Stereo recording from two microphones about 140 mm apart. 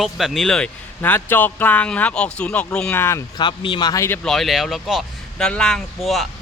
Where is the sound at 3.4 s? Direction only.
35° left (ahead or behind).